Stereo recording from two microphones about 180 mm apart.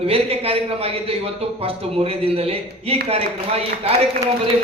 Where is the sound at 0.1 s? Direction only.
30° right (ahead or behind).